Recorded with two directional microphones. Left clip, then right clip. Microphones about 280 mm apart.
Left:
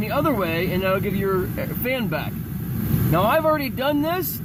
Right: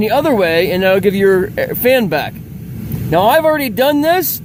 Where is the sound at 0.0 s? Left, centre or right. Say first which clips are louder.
Right 10 dB; right.